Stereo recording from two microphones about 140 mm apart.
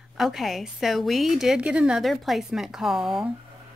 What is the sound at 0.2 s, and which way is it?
Speech, centre (ahead or behind).